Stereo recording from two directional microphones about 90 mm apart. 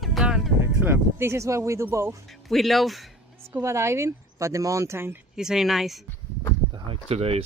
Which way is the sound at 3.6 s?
30° right (ahead or behind).